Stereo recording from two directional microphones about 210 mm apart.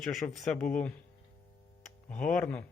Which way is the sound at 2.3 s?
5° left (ahead or behind).